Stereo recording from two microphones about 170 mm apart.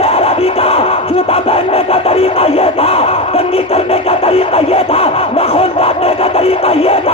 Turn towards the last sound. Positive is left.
turn(degrees=35)  # may be behind; listen again after turning